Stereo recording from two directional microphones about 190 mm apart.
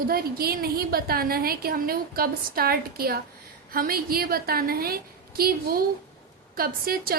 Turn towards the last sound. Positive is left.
turn(degrees=-50)  # may be behind; listen again after turning